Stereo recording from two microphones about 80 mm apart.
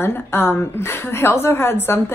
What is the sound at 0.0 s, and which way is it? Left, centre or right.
A woman's voice, left.